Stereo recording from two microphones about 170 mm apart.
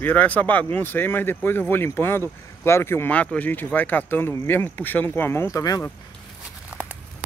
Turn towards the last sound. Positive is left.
turn(degrees=20)  # may be behind; listen again after turning